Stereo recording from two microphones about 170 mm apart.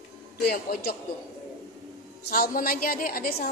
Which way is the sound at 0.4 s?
65° left (ahead or behind).